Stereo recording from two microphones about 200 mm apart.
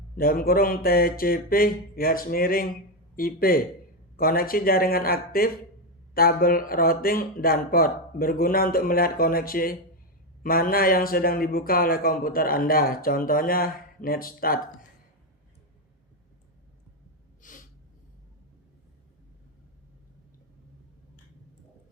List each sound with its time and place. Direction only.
0.2 s a man's voice: 45° left (ahead or behind)
17.4 s snort: 40° left (ahead or behind)